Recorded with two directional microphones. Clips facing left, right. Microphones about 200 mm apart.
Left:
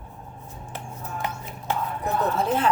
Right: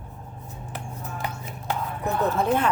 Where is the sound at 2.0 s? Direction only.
55° right (ahead or behind).